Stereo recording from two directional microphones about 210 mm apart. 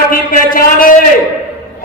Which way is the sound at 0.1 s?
45° left (ahead or behind).